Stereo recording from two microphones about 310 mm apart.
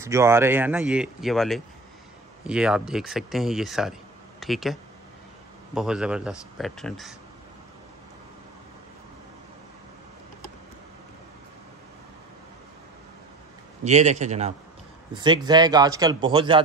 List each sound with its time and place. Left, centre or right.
0.0 s speech: centre
5.8 s speech: centre
13.8 s a man's voice: right